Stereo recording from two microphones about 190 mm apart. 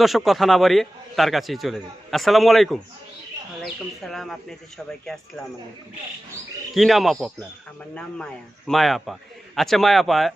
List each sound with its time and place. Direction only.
0.0 s a man's voice: centre (ahead or behind)
6.7 s a man's voice: centre (ahead or behind)